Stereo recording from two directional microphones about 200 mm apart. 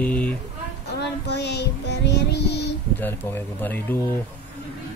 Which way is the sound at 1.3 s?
55° left (ahead or behind).